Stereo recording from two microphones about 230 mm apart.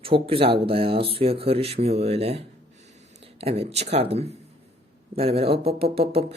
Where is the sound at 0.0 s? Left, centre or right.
Right.